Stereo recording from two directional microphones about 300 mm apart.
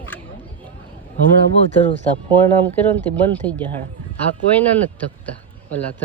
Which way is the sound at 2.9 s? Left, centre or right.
Centre.